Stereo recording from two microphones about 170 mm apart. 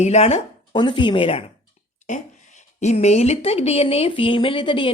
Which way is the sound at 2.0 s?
45° left (ahead or behind).